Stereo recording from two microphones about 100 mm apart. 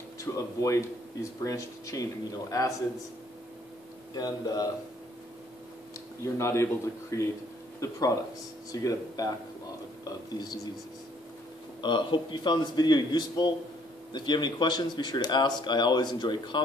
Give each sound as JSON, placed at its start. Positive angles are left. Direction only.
{"t": 0.2, "sound": "speech", "side_deg": 30}
{"t": 4.1, "sound": "speech", "side_deg": 40}
{"t": 6.2, "sound": "a man's voice", "side_deg": 30}
{"t": 10.3, "sound": "speech", "side_deg": 40}
{"t": 11.8, "sound": "speech", "side_deg": 50}